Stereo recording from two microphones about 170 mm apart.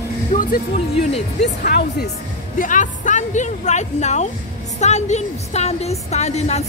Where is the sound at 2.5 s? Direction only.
50° left (ahead or behind).